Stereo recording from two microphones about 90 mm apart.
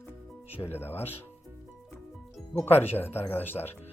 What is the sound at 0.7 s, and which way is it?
Speech, 25° left (ahead or behind).